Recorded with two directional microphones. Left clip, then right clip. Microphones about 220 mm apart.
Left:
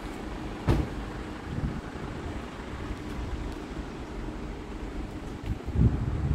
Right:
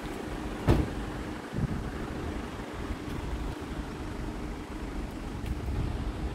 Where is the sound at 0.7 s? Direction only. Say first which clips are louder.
Right 2 dB; 35° right (ahead or behind).